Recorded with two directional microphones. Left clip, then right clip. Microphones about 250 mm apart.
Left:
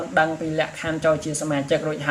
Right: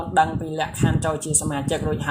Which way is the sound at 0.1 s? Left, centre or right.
Right.